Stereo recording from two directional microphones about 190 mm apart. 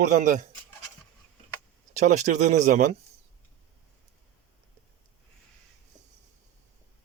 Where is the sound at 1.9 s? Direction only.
40° right (ahead or behind).